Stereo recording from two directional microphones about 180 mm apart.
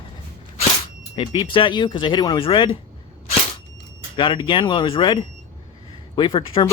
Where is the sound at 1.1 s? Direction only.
25° left (ahead or behind).